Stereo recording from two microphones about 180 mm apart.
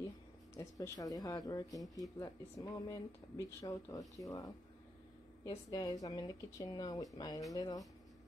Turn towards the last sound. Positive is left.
turn(degrees=20)  # may be behind; listen again after turning